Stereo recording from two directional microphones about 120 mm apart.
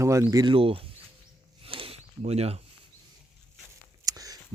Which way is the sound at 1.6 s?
50° right (ahead or behind).